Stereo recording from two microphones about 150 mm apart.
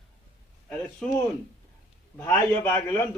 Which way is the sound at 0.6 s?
10° left (ahead or behind).